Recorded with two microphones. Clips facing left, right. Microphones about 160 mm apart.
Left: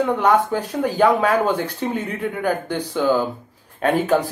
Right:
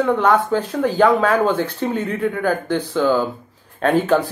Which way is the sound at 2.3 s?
15° left (ahead or behind).